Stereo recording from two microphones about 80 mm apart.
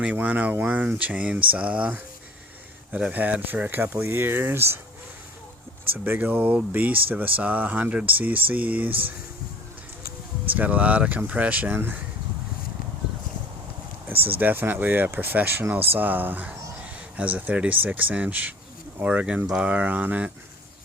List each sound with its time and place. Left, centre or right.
0.0 s speech: centre
5.9 s speech: right
10.5 s speech: centre
14.2 s speech: right